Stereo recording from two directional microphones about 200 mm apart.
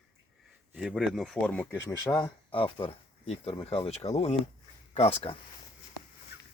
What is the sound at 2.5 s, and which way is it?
Speech, 25° left (ahead or behind).